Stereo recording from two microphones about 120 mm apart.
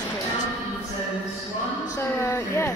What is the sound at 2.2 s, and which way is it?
Speech, 25° left (ahead or behind).